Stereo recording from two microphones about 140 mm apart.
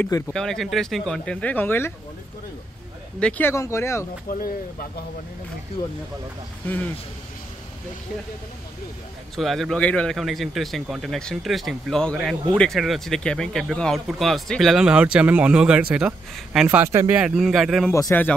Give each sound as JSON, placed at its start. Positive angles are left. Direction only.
{"t": 0.3, "sound": "speech", "side_deg": 5}
{"t": 3.2, "sound": "speech", "side_deg": 10}
{"t": 4.3, "sound": "speech", "side_deg": 90}
{"t": 6.6, "sound": "speech", "side_deg": 15}
{"t": 9.3, "sound": "a man's voice", "side_deg": 0}
{"t": 16.6, "sound": "a man's voice", "side_deg": -20}
{"t": 17.2, "sound": "speech", "side_deg": -5}